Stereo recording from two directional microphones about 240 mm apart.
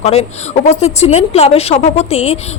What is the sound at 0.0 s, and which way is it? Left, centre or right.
A woman's voice, left.